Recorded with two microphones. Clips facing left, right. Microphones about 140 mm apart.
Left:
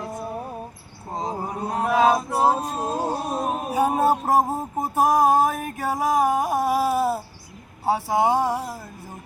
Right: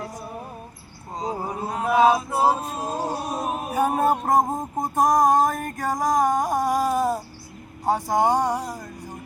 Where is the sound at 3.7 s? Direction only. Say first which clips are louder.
Left 1 dB; 10° left (ahead or behind).